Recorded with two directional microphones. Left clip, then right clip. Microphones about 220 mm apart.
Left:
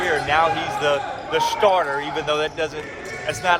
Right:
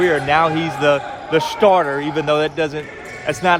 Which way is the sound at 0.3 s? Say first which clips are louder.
Right 3 dB; 45° right (ahead or behind).